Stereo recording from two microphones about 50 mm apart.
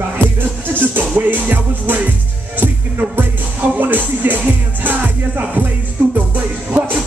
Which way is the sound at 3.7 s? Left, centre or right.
Right.